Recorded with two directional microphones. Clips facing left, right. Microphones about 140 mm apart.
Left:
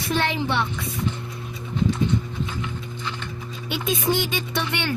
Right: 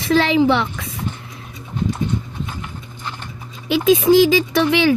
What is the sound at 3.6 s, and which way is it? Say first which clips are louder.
Speech: right 11 dB; 90° right.